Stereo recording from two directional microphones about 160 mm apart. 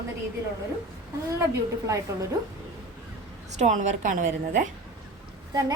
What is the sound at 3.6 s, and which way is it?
A woman's voice, 50° right (ahead or behind).